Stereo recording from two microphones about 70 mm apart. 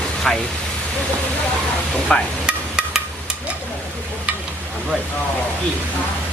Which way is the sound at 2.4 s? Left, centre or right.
Centre.